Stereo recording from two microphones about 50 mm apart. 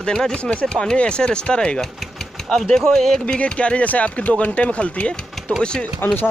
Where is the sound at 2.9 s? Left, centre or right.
Centre.